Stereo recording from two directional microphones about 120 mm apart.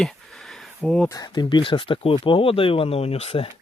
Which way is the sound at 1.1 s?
35° left (ahead or behind).